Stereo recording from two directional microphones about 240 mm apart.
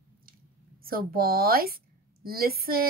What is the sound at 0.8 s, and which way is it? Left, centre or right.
A woman's voice, right.